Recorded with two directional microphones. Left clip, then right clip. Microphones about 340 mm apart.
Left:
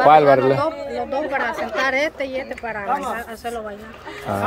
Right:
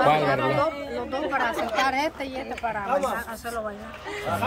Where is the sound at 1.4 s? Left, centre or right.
Centre.